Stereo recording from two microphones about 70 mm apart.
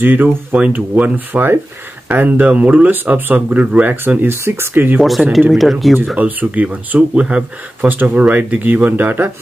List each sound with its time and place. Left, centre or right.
0.0 s speech: right
5.5 s speech: centre
6.1 s speech: right